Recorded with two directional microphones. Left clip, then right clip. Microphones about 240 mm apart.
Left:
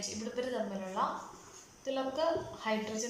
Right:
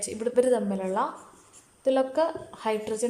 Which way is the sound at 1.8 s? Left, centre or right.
Right.